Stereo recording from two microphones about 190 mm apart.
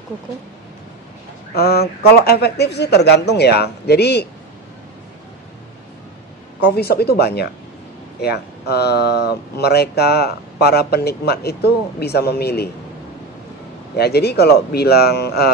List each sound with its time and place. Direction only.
1.5 s speech: 55° left (ahead or behind)
6.6 s speech: 55° left (ahead or behind)
13.9 s speech: 55° left (ahead or behind)